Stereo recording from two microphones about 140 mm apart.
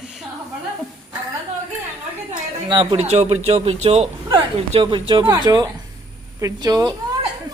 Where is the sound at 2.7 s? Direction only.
35° right (ahead or behind).